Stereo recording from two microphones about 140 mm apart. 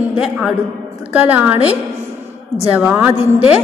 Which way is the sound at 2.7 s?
10° right (ahead or behind).